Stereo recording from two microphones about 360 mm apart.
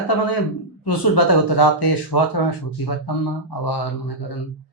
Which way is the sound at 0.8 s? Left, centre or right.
Left.